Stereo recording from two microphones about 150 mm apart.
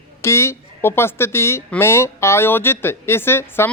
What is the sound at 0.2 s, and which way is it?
Speech, 20° left (ahead or behind).